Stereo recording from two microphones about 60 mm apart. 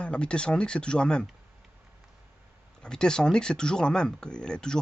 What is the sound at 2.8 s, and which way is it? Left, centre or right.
Speech, centre.